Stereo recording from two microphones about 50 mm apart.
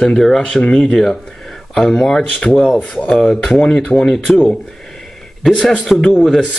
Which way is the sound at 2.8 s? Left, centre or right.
Left.